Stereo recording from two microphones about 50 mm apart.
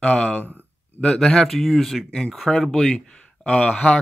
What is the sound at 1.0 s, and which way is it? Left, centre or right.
Speech, centre.